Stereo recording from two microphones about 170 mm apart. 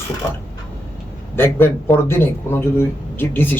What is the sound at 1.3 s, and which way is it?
Speech, 15° left (ahead or behind).